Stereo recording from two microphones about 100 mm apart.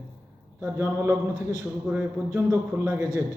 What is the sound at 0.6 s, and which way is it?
A man's voice, 25° right (ahead or behind).